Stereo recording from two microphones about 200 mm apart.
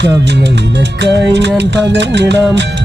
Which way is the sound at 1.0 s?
60° right (ahead or behind).